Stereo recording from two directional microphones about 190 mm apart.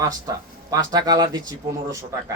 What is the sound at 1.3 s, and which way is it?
Speech, 15° right (ahead or behind).